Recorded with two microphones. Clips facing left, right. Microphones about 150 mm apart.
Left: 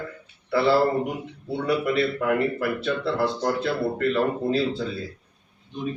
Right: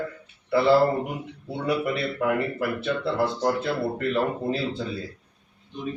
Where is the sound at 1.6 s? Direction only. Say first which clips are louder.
Left 3 dB; 15° right (ahead or behind).